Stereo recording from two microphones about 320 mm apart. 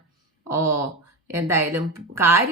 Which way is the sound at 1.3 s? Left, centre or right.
Centre.